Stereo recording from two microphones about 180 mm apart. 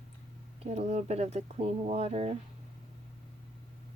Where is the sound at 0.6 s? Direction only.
35° right (ahead or behind).